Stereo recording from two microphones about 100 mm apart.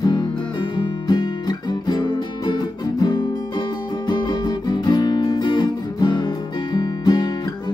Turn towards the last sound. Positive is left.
turn(degrees=45)  # may be behind; listen again after turning